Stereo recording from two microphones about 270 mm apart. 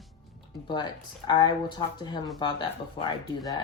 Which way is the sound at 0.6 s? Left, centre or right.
Centre.